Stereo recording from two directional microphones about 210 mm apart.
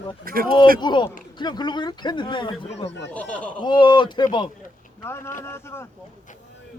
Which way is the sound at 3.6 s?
20° left (ahead or behind).